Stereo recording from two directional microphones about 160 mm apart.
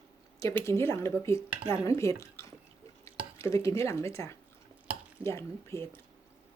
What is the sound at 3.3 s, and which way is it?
A woman's voice, 15° left (ahead or behind).